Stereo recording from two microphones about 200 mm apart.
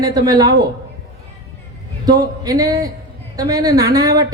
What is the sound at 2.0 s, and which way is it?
A woman's voice, 20° right (ahead or behind).